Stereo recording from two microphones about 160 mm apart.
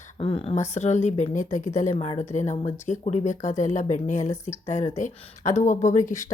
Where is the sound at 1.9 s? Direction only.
40° left (ahead or behind).